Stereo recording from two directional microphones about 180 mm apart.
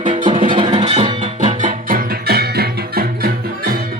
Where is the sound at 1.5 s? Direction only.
45° right (ahead or behind).